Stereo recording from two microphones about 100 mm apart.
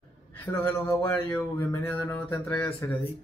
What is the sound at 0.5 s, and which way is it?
Speech, 25° left (ahead or behind).